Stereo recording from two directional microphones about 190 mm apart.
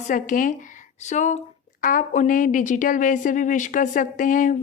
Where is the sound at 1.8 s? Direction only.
45° left (ahead or behind).